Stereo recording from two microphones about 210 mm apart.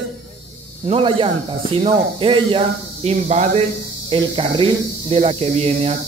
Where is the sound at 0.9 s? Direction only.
25° right (ahead or behind).